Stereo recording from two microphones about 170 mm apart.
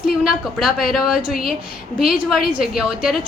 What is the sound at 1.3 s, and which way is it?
Speech, 60° left (ahead or behind).